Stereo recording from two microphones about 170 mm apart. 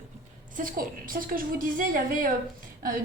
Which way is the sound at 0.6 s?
55° right (ahead or behind).